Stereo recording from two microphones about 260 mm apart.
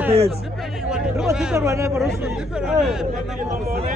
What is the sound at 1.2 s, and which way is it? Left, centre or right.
Speech, centre.